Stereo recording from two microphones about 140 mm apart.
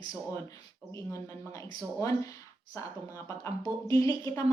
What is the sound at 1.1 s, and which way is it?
A woman's voice, 20° left (ahead or behind).